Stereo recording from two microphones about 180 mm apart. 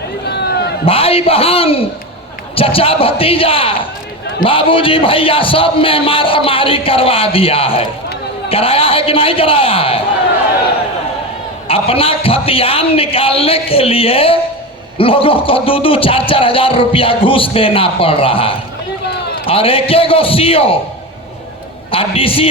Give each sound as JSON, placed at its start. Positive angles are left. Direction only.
{"t": 0.3, "sound": "a sound", "side_deg": 65}
{"t": 0.9, "sound": "a man's voice", "side_deg": 30}
{"t": 11.7, "sound": "a man's voice", "side_deg": 30}
{"t": 21.9, "sound": "a man's voice", "side_deg": 30}